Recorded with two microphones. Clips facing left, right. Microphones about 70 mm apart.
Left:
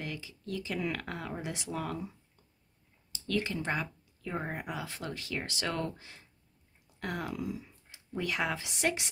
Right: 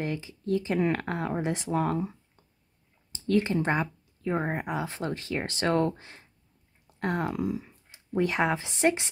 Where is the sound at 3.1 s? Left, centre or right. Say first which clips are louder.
Right 8 dB; right.